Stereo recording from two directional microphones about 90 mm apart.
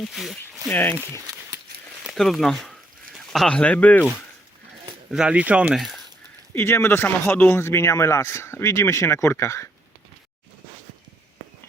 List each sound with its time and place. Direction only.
0.0 s speech: centre (ahead or behind)
0.7 s speech: 25° left (ahead or behind)
2.1 s speech: centre (ahead or behind)
5.1 s speech: 10° right (ahead or behind)
6.5 s speech: 25° left (ahead or behind)